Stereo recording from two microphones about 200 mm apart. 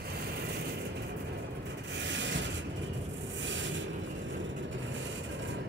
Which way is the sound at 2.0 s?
65° right (ahead or behind).